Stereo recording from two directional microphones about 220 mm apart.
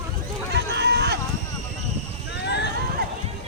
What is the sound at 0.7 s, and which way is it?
Run, 50° right (ahead or behind).